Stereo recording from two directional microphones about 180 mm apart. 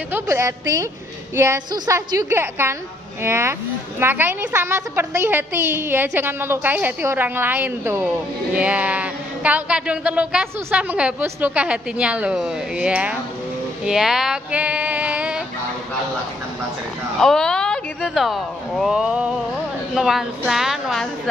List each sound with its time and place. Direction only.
0.1 s a woman's voice: 15° right (ahead or behind)
13.8 s female singing: centre (ahead or behind)
17.2 s a woman's voice: 5° left (ahead or behind)